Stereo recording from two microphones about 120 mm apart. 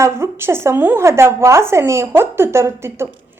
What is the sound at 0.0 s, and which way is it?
Speech, 20° right (ahead or behind).